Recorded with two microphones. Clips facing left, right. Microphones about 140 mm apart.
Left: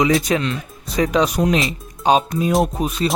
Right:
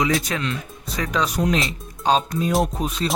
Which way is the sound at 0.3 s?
20° left (ahead or behind).